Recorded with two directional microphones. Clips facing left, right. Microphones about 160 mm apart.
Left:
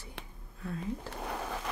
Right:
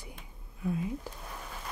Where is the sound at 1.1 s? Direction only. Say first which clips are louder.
Left 7 dB; 80° left.